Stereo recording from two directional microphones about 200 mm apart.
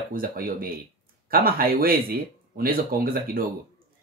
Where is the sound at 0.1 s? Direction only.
45° right (ahead or behind).